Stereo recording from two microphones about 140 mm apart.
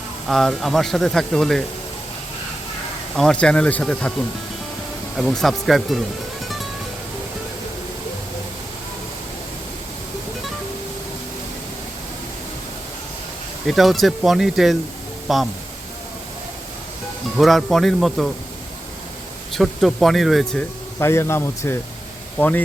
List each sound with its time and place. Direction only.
0.3 s speech: centre (ahead or behind)
3.2 s speech: 5° left (ahead or behind)
5.1 s speech: centre (ahead or behind)
13.7 s speech: centre (ahead or behind)
17.3 s speech: centre (ahead or behind)
19.5 s speech: centre (ahead or behind)
21.0 s speech: 20° left (ahead or behind)